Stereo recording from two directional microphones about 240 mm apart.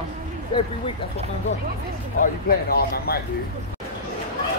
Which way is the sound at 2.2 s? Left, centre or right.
Left.